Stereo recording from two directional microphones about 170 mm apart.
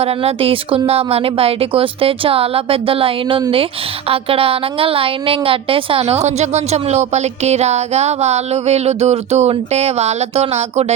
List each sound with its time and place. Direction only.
0.0 s a woman's voice: 35° right (ahead or behind)